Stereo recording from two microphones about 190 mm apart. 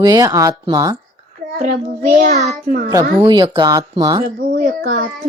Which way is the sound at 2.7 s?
45° right (ahead or behind).